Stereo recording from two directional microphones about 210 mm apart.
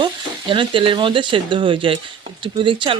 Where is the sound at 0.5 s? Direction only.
25° right (ahead or behind).